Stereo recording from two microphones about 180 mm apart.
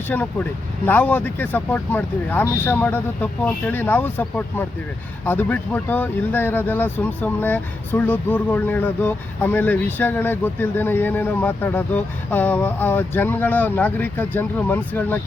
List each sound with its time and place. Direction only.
0.1 s speech: 10° left (ahead or behind)